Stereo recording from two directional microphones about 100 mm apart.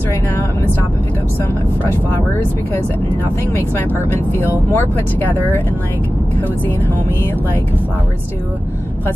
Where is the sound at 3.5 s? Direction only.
20° left (ahead or behind).